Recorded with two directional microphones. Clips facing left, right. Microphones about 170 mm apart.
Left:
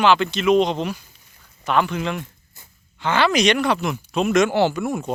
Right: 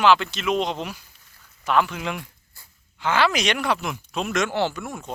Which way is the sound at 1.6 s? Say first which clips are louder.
Left 2 dB; 5° right (ahead or behind).